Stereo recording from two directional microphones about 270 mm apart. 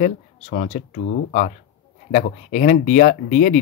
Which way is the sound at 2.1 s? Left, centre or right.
Left.